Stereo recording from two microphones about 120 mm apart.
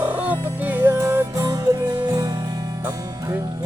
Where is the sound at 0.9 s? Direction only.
25° right (ahead or behind).